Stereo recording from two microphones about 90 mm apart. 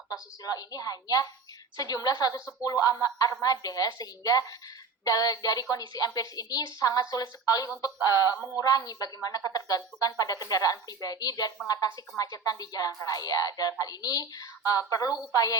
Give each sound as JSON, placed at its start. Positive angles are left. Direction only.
{"t": 0.1, "sound": "a woman's voice", "side_deg": 45}